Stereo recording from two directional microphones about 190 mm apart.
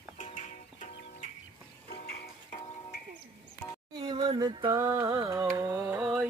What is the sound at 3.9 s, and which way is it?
Music, 25° right (ahead or behind).